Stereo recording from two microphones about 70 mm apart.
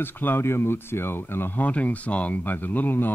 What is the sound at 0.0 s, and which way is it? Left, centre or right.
Speech, left.